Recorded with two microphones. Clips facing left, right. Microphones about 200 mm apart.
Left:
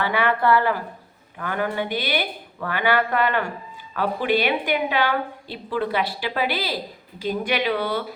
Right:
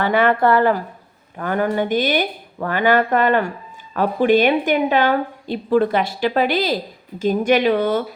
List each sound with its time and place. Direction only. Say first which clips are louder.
0.0 s a woman's voice: right 5 dB; 45° right (ahead or behind)